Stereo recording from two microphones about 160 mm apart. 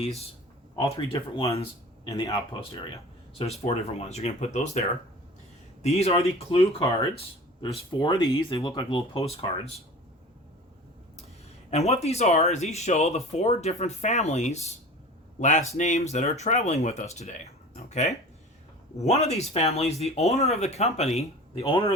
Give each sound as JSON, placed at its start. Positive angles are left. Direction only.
{"t": 1.4, "sound": "speech", "side_deg": 40}
{"t": 2.0, "sound": "speech", "side_deg": 20}
{"t": 5.8, "sound": "speech", "side_deg": 40}
{"t": 11.7, "sound": "speech", "side_deg": 40}